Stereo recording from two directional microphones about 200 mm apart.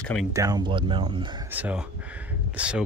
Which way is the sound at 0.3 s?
15° right (ahead or behind).